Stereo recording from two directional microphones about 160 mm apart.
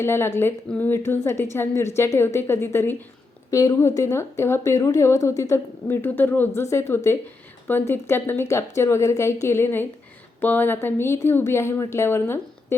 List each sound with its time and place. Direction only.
0.0 s speech: 15° left (ahead or behind)